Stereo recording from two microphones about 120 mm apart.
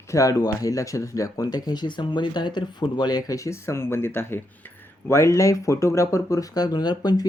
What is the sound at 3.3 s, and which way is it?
Speech, 25° left (ahead or behind).